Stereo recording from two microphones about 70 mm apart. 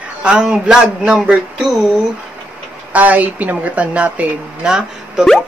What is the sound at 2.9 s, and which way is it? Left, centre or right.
Speech, right.